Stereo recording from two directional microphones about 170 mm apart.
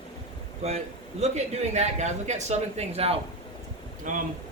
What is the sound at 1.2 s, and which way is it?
A man's voice, 40° right (ahead or behind).